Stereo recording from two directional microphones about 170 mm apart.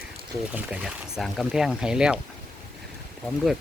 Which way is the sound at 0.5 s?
5° right (ahead or behind).